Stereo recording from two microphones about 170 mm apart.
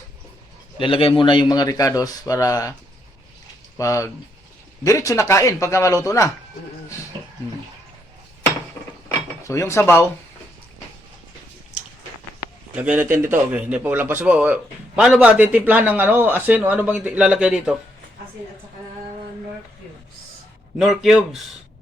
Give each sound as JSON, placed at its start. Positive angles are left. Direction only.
{"t": 0.8, "sound": "a man's voice", "side_deg": 30}
{"t": 3.8, "sound": "cutlery", "side_deg": 20}
{"t": 4.8, "sound": "a man's voice", "side_deg": 20}
{"t": 9.4, "sound": "cutlery", "side_deg": 15}
{"t": 12.7, "sound": "a man's voice", "side_deg": -10}
{"t": 20.7, "sound": "a man's voice", "side_deg": 0}